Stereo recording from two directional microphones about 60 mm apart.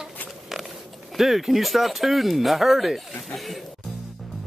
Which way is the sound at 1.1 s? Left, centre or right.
Centre.